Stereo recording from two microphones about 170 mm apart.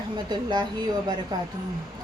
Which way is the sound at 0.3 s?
25° right (ahead or behind).